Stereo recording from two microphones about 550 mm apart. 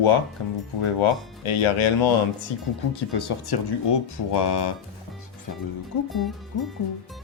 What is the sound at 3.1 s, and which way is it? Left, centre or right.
Speech, left.